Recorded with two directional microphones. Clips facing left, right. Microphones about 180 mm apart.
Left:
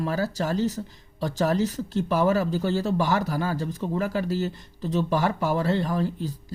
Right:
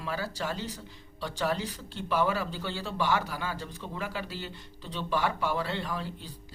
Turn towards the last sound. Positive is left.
turn(degrees=45)  # may be behind; listen again after turning